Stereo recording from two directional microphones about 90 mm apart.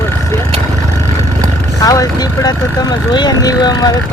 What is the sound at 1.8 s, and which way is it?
Speech, 40° left (ahead or behind).